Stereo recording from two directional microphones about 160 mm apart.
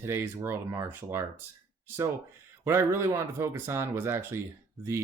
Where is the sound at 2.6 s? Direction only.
15° right (ahead or behind).